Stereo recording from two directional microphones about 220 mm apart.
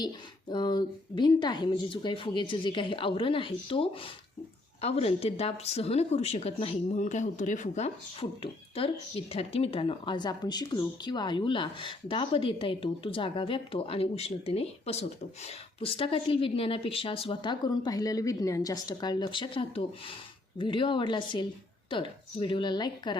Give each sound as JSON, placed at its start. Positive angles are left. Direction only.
{"t": 0.5, "sound": "speech", "side_deg": 20}